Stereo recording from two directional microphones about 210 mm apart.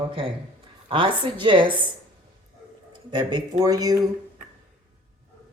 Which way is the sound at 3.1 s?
20° right (ahead or behind).